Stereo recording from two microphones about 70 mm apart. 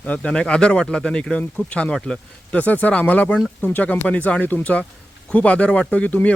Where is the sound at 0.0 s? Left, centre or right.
Centre.